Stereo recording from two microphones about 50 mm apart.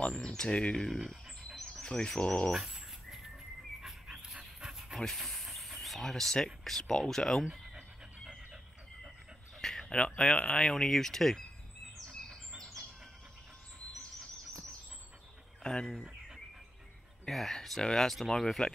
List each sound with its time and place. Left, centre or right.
0.0 s speech: centre
0.7 s speech: centre
4.2 s dog: centre
4.9 s a sound: centre
6.8 s speech: centre
9.6 s a sound: centre
10.5 s speech: centre
12.1 s bird: centre
15.6 s speech: centre
15.9 s a sound: centre
17.3 s speech: centre